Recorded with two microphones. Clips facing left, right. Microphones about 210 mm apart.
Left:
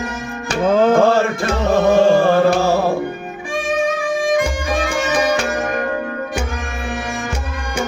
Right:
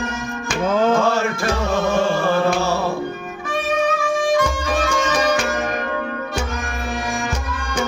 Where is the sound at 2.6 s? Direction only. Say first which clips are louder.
Left 5 dB; 50° left (ahead or behind).